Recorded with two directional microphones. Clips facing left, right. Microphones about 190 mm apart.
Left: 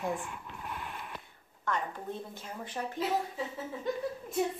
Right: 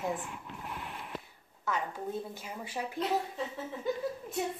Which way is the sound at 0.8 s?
30° right (ahead or behind).